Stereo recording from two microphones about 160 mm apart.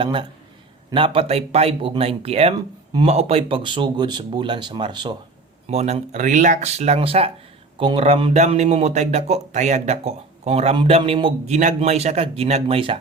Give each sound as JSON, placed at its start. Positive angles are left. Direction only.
{"t": 0.0, "sound": "a man's voice", "side_deg": -30}
{"t": 5.6, "sound": "a man's voice", "side_deg": -45}